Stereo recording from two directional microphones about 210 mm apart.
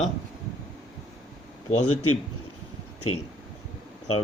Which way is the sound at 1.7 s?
90° left.